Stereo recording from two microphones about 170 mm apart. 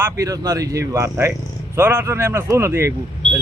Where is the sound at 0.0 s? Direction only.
20° right (ahead or behind).